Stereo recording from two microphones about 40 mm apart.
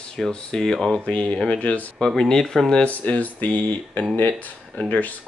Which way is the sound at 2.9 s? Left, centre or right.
Left.